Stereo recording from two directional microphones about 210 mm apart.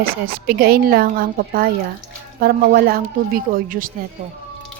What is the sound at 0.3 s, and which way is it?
Speech, 45° right (ahead or behind).